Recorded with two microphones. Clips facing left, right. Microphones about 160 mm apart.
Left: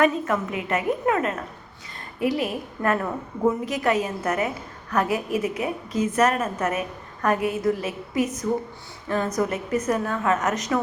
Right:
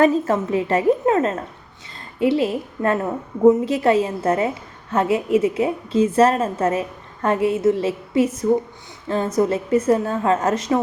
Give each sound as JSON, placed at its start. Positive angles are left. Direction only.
{"t": 0.0, "sound": "a woman's voice", "side_deg": -30}